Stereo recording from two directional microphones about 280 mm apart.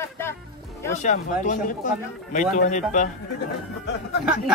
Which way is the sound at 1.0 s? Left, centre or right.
Left.